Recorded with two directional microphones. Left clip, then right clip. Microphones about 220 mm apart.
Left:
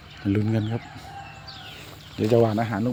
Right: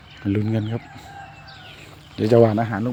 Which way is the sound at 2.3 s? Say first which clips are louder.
Right 5 dB; 50° right (ahead or behind).